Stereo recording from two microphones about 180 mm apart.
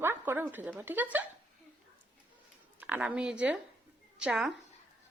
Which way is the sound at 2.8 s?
10° right (ahead or behind).